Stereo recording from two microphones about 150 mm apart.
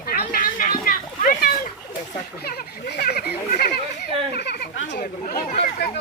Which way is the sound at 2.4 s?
90° left.